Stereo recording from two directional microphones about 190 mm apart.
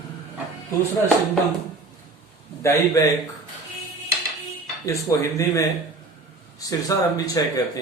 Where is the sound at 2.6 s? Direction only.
15° left (ahead or behind).